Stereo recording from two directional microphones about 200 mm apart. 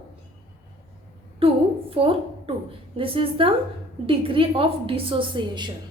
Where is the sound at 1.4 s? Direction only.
30° right (ahead or behind).